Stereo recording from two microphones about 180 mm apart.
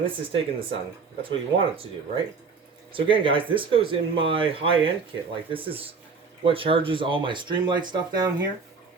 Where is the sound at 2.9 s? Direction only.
30° right (ahead or behind).